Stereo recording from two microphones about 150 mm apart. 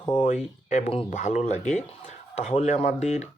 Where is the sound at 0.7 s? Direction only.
45° left (ahead or behind).